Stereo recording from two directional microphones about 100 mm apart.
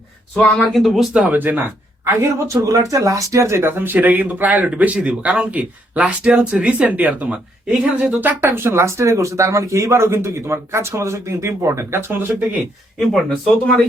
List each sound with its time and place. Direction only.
0.7 s speech: centre (ahead or behind)
1.2 s speech: 15° right (ahead or behind)
2.0 s speech: 35° right (ahead or behind)
13.0 s speech: centre (ahead or behind)